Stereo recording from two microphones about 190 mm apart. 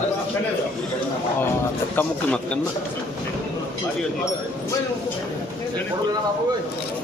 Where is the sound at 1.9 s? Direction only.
10° left (ahead or behind).